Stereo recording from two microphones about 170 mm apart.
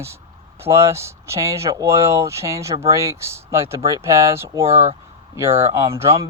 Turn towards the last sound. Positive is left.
turn(degrees=-15)  # may be behind; listen again after turning